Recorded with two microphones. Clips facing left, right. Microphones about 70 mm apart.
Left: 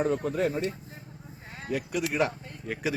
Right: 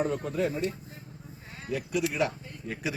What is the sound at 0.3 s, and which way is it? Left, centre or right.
Speech, left.